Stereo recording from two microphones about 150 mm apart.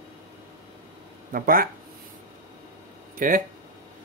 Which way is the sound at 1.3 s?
70° right (ahead or behind).